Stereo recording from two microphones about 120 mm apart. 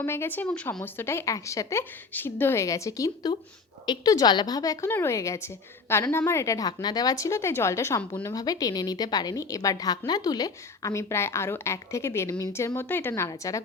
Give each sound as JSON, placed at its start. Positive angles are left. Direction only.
{"t": 0.0, "sound": "speech", "side_deg": 20}
{"t": 0.9, "sound": "a woman's voice", "side_deg": 20}